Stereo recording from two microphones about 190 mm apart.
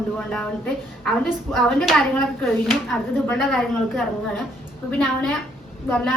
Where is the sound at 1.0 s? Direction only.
Centre (ahead or behind).